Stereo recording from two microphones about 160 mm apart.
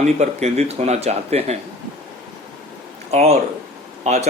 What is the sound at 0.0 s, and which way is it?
Speech, 45° right (ahead or behind).